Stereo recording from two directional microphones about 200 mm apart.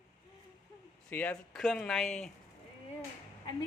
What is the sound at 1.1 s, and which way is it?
Speech, 5° left (ahead or behind).